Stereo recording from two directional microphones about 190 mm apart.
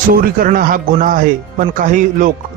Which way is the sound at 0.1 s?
50° right (ahead or behind).